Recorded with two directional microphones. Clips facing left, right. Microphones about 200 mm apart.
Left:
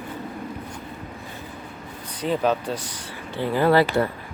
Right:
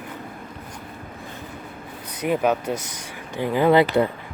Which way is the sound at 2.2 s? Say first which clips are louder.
Right 1 dB; 15° right (ahead or behind).